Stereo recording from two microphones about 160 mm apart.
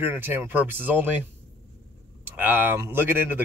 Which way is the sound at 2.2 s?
10° right (ahead or behind).